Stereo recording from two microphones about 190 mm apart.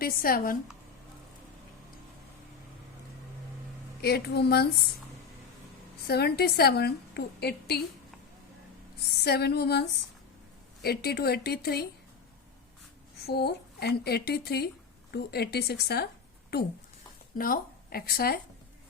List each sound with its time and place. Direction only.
0.0 s speech: 50° left (ahead or behind)
4.0 s a woman's voice: 55° left (ahead or behind)
6.1 s a woman's voice: 55° left (ahead or behind)
9.2 s a woman's voice: 60° left (ahead or behind)
10.8 s a woman's voice: 55° left (ahead or behind)
13.2 s a woman's voice: 60° left (ahead or behind)